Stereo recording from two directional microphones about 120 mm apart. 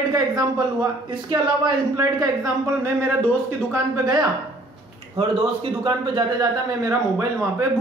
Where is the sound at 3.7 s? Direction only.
30° right (ahead or behind).